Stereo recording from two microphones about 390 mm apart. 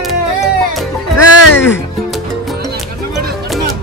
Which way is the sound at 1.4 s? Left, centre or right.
Left.